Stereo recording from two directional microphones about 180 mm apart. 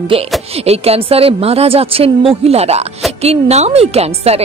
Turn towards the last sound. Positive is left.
turn(degrees=-35)  # may be behind; listen again after turning